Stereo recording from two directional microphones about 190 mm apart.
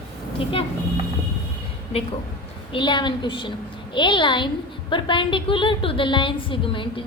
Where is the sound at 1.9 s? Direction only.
30° left (ahead or behind).